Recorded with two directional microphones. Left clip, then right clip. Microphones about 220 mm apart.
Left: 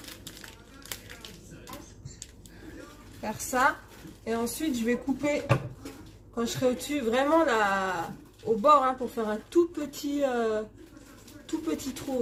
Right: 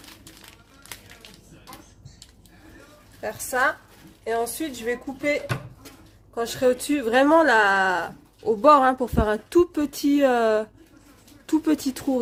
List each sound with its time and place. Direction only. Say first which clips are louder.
3.2 s speech: right 3 dB; 55° right (ahead or behind)
6.3 s speech: right 6 dB; 50° right (ahead or behind)